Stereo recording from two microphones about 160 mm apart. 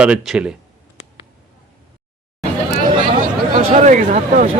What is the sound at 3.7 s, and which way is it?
Speech, 50° right (ahead or behind).